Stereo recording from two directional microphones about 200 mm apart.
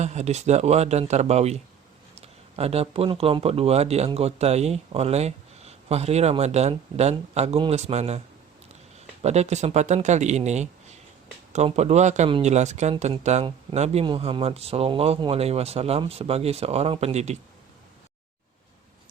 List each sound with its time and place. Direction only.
0.0 s speech: 35° right (ahead or behind)
9.2 s speech: 35° right (ahead or behind)